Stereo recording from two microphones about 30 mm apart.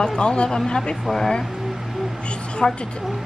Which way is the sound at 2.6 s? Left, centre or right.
Centre.